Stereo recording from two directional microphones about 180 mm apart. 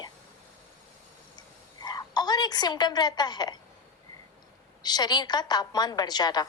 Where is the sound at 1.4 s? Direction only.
20° left (ahead or behind).